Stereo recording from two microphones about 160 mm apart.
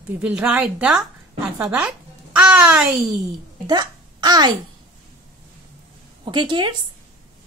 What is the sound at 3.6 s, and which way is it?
Speech, 25° right (ahead or behind).